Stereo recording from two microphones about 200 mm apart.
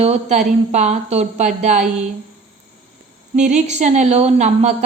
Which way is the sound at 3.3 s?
35° right (ahead or behind).